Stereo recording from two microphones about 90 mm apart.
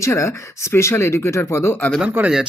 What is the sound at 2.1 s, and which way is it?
Speech, 15° right (ahead or behind).